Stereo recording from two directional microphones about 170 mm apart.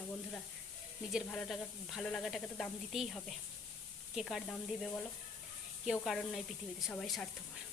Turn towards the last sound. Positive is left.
turn(degrees=5)  # may be behind; listen again after turning